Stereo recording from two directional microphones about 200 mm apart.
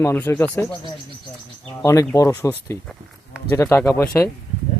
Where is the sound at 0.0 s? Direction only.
10° left (ahead or behind).